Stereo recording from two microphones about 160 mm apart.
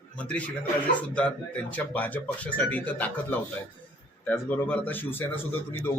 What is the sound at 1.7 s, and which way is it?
Speech, 10° left (ahead or behind).